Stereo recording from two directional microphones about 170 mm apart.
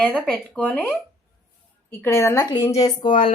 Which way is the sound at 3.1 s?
50° left (ahead or behind).